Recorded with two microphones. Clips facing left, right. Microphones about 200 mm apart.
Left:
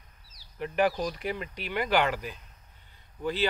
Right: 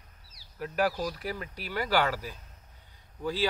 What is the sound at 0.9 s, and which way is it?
Speech, 15° left (ahead or behind).